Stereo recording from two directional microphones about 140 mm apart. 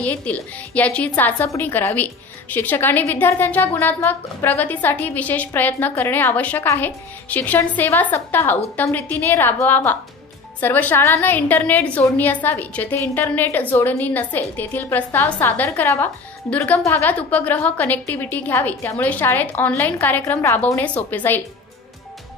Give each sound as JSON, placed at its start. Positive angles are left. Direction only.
{"t": 0.0, "sound": "a woman's voice", "side_deg": 10}